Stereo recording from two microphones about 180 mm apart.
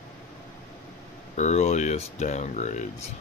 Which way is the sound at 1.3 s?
40° left (ahead or behind).